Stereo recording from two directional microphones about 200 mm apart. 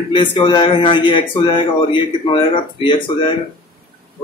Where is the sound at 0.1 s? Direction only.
25° left (ahead or behind).